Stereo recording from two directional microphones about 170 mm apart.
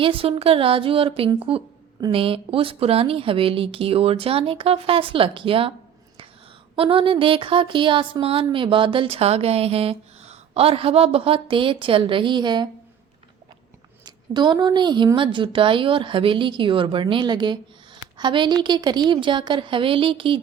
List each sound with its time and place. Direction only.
0.0 s speech: 35° right (ahead or behind)
6.7 s speech: 30° right (ahead or behind)
14.0 s speech: 25° right (ahead or behind)